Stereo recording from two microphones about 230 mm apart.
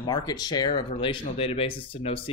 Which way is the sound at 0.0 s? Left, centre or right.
Centre.